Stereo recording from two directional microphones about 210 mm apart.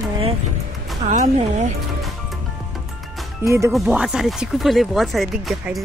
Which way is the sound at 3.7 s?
Centre (ahead or behind).